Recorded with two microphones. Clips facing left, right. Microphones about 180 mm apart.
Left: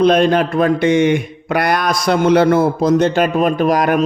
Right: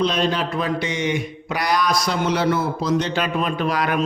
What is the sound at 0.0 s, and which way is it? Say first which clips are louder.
Speech: left 9 dB; 55° left (ahead or behind).